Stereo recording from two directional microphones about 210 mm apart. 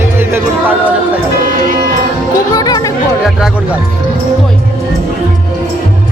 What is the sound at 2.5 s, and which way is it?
Music, 15° left (ahead or behind).